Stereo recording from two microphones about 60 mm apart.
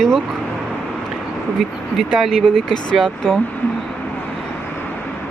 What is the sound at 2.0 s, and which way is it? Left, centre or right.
Speech, centre.